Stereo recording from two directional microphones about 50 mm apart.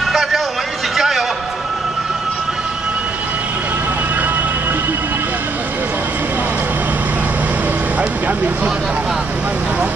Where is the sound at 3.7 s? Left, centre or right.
Right.